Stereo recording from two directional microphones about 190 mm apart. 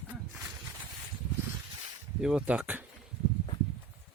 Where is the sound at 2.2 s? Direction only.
5° right (ahead or behind).